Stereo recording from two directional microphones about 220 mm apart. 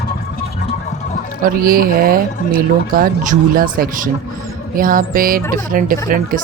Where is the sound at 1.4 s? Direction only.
40° right (ahead or behind).